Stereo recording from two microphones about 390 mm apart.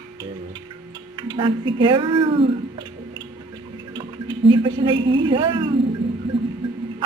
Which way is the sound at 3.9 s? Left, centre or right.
Centre.